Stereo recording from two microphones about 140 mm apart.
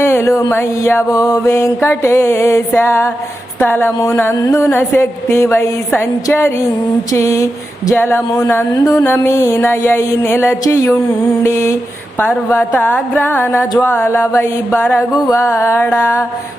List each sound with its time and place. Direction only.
0.0 s mantra: 20° left (ahead or behind)
3.6 s speech: 15° left (ahead or behind)
6.2 s mantra: 20° left (ahead or behind)
7.9 s speech: 15° left (ahead or behind)
8.7 s mantra: 25° left (ahead or behind)
12.2 s speech: 15° left (ahead or behind)